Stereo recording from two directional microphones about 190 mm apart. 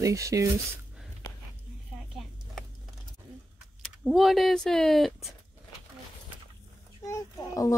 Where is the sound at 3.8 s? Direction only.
Centre (ahead or behind).